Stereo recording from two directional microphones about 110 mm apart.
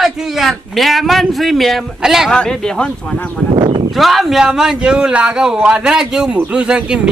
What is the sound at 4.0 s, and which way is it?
A man's voice, centre (ahead or behind).